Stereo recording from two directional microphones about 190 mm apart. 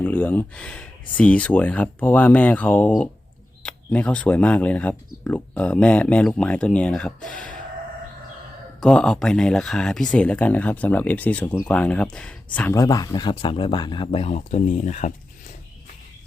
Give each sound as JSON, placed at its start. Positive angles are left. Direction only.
{"t": 0.0, "sound": "speech", "side_deg": 10}
{"t": 8.8, "sound": "speech", "side_deg": 5}